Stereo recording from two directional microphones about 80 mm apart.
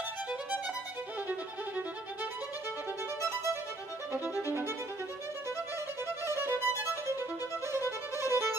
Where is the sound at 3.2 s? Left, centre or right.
Right.